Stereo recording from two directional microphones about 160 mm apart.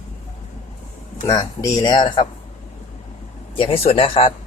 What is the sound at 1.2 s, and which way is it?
Speech, 25° left (ahead or behind).